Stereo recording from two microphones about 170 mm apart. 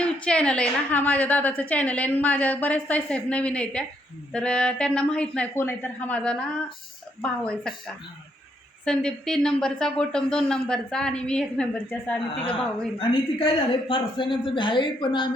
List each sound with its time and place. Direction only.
0.0 s a woman's voice: 5° left (ahead or behind)
8.8 s speech: 5° left (ahead or behind)
13.0 s speech: 30° left (ahead or behind)